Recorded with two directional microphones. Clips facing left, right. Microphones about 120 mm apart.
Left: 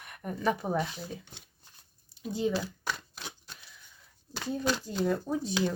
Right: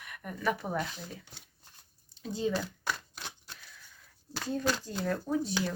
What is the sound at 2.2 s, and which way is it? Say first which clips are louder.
Speech: left 2 dB; 10° left (ahead or behind).